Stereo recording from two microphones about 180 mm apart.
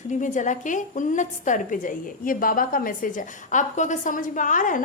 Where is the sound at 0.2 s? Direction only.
45° left (ahead or behind).